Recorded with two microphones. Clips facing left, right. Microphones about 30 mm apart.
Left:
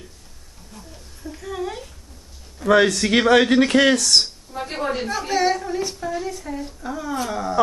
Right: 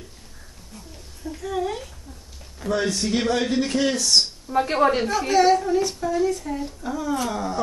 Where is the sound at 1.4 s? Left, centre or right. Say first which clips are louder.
Right 2 dB; centre.